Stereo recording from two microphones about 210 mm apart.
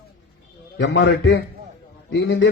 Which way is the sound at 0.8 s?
50° left (ahead or behind).